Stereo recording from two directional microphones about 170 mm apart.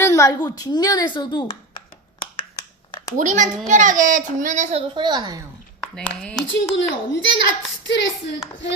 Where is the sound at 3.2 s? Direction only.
50° right (ahead or behind).